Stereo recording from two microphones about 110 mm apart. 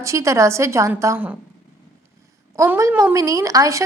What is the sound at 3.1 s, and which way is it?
Speech, 30° right (ahead or behind).